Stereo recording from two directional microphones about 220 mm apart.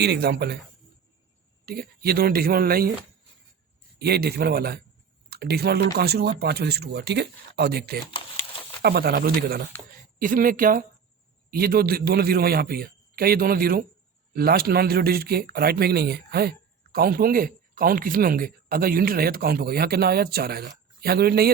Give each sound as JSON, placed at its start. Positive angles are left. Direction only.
{"t": 0.0, "sound": "speech", "side_deg": -45}
{"t": 1.6, "sound": "speech", "side_deg": -45}
{"t": 3.9, "sound": "speech", "side_deg": -45}